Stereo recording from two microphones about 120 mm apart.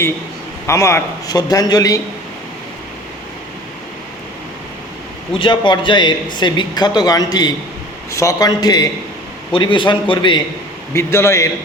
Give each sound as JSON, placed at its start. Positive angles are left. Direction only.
{"t": 0.7, "sound": "speech", "side_deg": 25}
{"t": 5.4, "sound": "speech", "side_deg": 40}
{"t": 9.5, "sound": "speech", "side_deg": 45}
{"t": 10.9, "sound": "a man's voice", "side_deg": 20}